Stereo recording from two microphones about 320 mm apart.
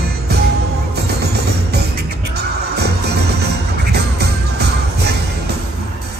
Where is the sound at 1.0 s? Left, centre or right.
Right.